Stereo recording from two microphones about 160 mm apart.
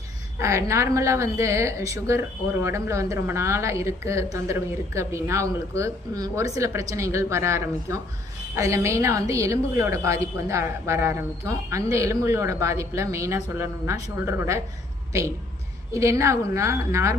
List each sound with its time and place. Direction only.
0.3 s a woman's voice: 20° right (ahead or behind)
15.9 s a woman's voice: 20° right (ahead or behind)